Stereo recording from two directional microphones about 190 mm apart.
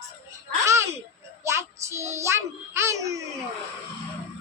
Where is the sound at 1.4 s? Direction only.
15° right (ahead or behind).